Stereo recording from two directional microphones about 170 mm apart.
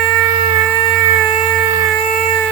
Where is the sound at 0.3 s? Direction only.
30° right (ahead or behind).